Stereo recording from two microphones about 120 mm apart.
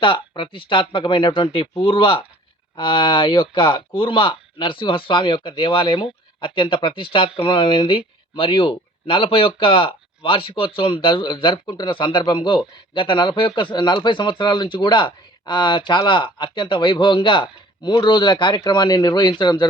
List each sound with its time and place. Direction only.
0.0 s speech: 45° left (ahead or behind)